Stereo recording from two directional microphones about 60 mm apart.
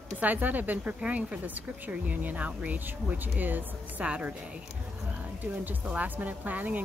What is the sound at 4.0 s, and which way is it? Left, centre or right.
A woman's voice, centre.